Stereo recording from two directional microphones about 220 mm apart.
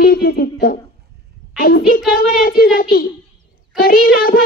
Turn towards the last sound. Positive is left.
turn(degrees=40)  # may be behind; listen again after turning